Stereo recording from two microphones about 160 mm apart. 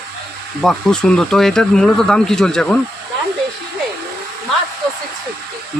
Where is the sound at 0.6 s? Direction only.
5° left (ahead or behind).